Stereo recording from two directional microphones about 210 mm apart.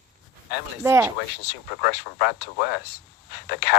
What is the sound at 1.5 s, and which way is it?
Speech, 50° left (ahead or behind).